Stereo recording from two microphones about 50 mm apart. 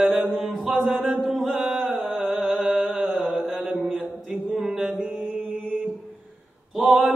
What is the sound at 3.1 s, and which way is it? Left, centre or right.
Mantra, centre.